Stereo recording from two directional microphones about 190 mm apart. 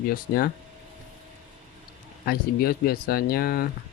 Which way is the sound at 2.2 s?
50° left (ahead or behind).